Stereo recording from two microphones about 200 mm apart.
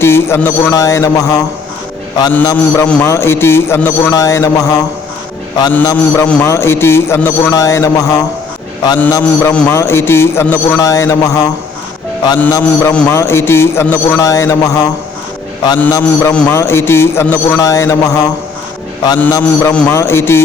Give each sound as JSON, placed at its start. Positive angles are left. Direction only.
{"t": 0.0, "sound": "a man's voice", "side_deg": 10}